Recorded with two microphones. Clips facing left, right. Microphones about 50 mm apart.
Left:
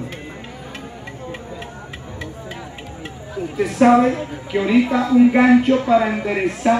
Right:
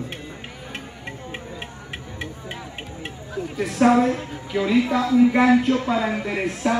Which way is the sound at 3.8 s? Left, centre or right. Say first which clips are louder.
Left 4 dB; left.